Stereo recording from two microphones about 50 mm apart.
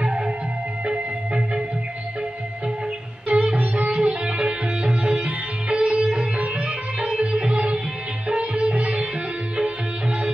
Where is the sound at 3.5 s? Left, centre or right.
Right.